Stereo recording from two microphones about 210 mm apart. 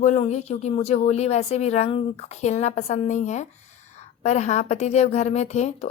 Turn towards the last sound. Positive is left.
turn(degrees=30)  # may be behind; listen again after turning